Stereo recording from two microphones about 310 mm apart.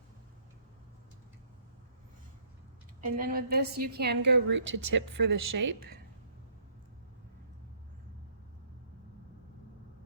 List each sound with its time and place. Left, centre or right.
3.0 s a woman's voice: right